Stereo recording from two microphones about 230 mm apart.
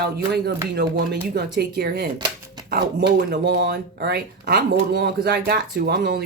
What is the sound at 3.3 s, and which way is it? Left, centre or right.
Speech, right.